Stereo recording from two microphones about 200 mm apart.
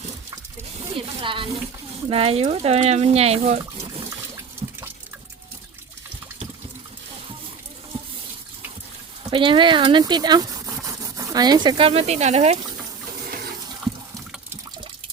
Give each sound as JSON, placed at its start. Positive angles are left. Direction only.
{"t": 0.9, "sound": "snake", "side_deg": -25}
{"t": 2.0, "sound": "speech", "side_deg": -30}
{"t": 4.6, "sound": "water", "side_deg": -30}
{"t": 9.3, "sound": "speech", "side_deg": -25}